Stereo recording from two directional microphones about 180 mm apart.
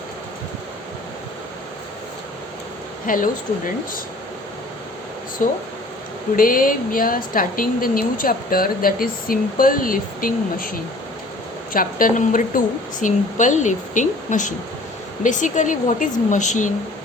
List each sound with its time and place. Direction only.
3.1 s speech: 50° left (ahead or behind)
5.4 s speech: 45° left (ahead or behind)